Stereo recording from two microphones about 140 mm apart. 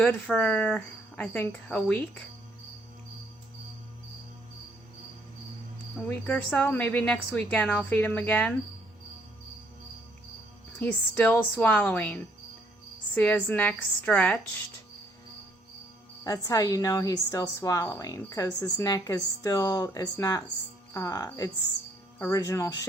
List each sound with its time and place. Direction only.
0.0 s speech: 10° left (ahead or behind)
6.1 s speech: 10° left (ahead or behind)
10.8 s speech: 10° left (ahead or behind)
16.2 s a woman's voice: 25° left (ahead or behind)
22.3 s a woman's voice: 25° left (ahead or behind)